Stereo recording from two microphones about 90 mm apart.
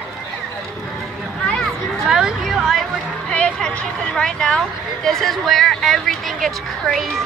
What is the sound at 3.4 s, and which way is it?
Speech, 10° left (ahead or behind).